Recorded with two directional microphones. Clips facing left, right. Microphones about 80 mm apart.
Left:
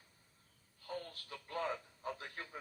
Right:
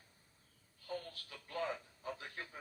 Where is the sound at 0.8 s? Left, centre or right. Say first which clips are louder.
Even; left.